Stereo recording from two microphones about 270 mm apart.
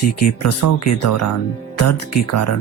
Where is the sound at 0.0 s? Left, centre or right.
Left.